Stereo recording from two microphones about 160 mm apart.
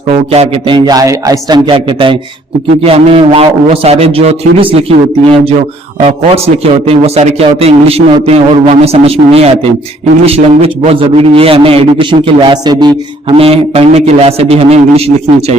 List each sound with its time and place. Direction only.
0.3 s a man's voice: 30° right (ahead or behind)